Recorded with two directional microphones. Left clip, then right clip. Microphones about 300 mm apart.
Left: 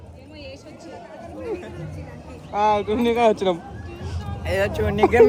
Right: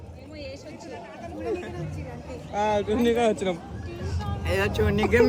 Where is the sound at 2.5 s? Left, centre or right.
Left.